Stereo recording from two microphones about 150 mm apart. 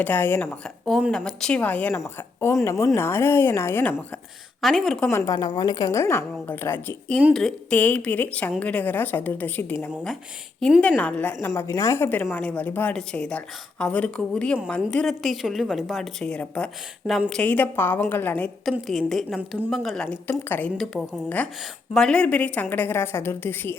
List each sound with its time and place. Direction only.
0.0 s a woman's voice: 15° left (ahead or behind)
0.9 s a woman's voice: centre (ahead or behind)
4.6 s a woman's voice: centre (ahead or behind)
5.1 s a woman's voice: 25° left (ahead or behind)
11.4 s a woman's voice: 20° left (ahead or behind)